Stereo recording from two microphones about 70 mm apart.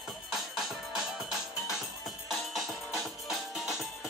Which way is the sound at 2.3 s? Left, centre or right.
Centre.